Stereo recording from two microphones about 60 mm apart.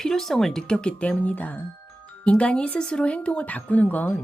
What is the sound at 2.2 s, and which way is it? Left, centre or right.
Speech, centre.